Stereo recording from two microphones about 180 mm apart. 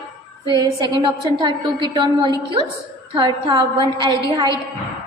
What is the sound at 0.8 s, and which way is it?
A woman's voice, 25° right (ahead or behind).